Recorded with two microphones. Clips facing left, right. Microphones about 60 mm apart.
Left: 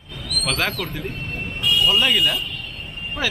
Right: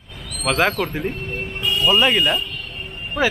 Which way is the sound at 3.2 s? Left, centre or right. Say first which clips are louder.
Right 6 dB; right.